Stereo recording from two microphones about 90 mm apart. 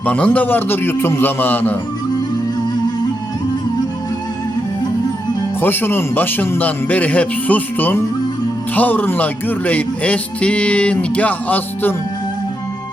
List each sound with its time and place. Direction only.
0.0 s speech: 15° left (ahead or behind)
5.5 s speech: 25° left (ahead or behind)